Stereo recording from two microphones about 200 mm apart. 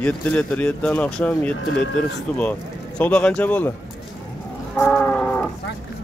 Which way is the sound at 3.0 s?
5° left (ahead or behind).